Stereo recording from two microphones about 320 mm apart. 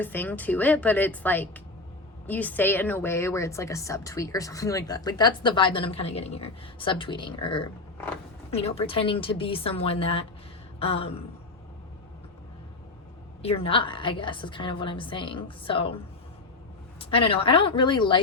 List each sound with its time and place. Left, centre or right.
0.0 s a woman's voice: centre
10.8 s a sound: centre
13.4 s a woman's voice: centre
17.0 s a woman's voice: centre